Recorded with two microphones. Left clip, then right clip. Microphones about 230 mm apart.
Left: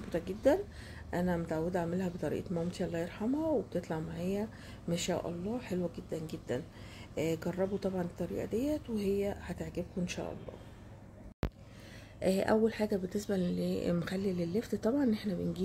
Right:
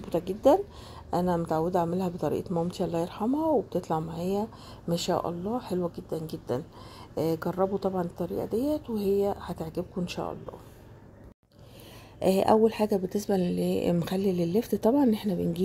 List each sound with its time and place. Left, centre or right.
0.1 s speech: right
12.2 s speech: right